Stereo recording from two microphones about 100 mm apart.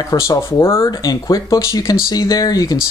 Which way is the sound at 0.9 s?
40° left (ahead or behind).